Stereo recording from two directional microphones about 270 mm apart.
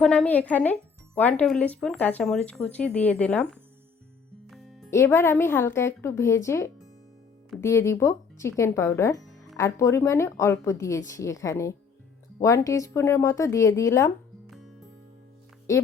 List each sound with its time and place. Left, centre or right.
0.0 s speech: centre
4.5 s music: centre
4.9 s speech: centre
14.5 s music: centre